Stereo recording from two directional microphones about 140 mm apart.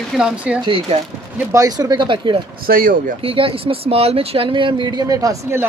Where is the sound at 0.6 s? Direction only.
40° right (ahead or behind).